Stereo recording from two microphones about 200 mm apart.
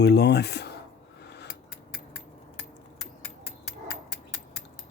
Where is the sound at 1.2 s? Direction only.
60° left (ahead or behind).